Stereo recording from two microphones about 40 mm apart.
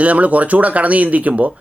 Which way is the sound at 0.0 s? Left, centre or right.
Right.